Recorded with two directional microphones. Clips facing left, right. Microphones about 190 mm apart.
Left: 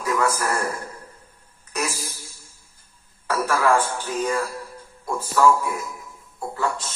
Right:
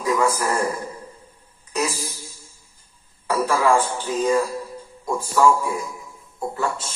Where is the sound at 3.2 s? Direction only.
15° right (ahead or behind).